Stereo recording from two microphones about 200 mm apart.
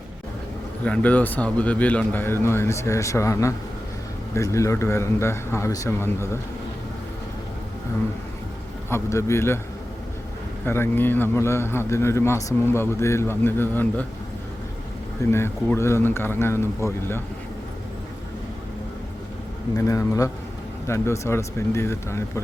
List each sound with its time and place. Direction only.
0.9 s a man's voice: 5° left (ahead or behind)
8.9 s a man's voice: 15° left (ahead or behind)
10.7 s a man's voice: 10° left (ahead or behind)
15.3 s a man's voice: 10° left (ahead or behind)
19.7 s a man's voice: 15° left (ahead or behind)